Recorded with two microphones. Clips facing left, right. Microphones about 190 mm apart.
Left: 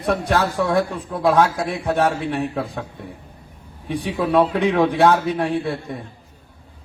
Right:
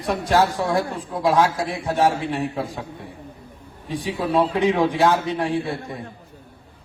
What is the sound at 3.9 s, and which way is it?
A man's voice, 60° left (ahead or behind).